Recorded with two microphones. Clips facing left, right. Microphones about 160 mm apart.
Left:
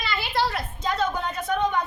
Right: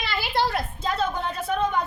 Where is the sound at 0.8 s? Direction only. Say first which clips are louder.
Left 2 dB; 5° right (ahead or behind).